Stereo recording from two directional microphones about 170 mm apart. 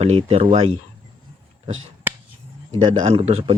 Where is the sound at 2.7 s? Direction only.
30° right (ahead or behind).